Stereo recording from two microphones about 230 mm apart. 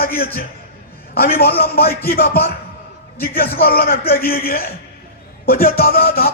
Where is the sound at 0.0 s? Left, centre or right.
Left.